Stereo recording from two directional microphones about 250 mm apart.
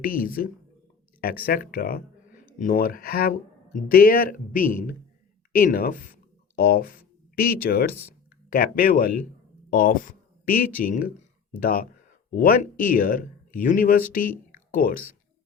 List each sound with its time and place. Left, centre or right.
0.0 s speech: left